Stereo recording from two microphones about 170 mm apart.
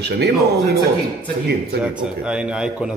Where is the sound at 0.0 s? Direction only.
80° right.